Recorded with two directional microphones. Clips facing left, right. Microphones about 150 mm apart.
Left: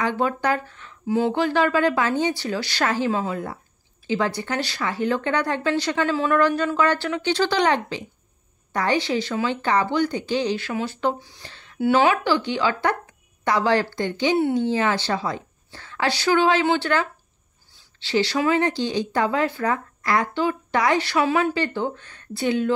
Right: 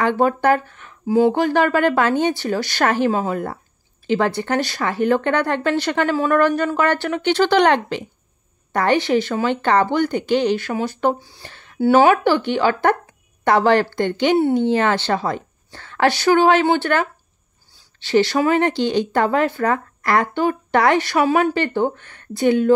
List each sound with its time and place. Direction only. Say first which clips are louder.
0.0 s speech: right 6 dB; 60° right (ahead or behind)
3.1 s speech: right 4 dB; 45° right (ahead or behind); by 10.7 s 60° right (ahead or behind)
10.7 s speech: right 4 dB; 45° right (ahead or behind)
11.4 s a sound: right 3 dB; 50° right (ahead or behind)
11.8 s speech: right 5 dB; 45° right (ahead or behind)
18.0 s speech: right 5 dB; 50° right (ahead or behind)